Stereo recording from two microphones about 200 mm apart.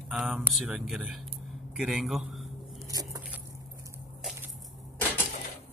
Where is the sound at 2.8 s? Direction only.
20° right (ahead or behind).